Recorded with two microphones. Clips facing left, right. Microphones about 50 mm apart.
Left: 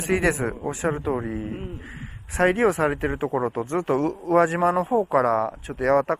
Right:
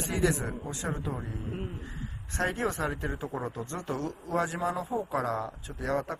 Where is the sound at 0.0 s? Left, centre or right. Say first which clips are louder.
Left 7 dB; left.